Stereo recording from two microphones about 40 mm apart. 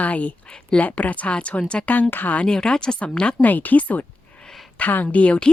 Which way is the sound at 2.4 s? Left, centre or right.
Left.